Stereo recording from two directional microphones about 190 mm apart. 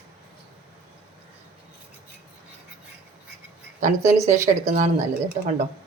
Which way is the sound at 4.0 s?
15° right (ahead or behind).